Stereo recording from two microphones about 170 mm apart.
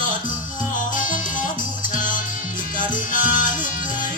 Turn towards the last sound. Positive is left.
turn(degrees=50)  # may be behind; listen again after turning